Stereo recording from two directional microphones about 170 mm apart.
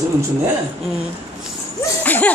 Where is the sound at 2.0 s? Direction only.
10° left (ahead or behind).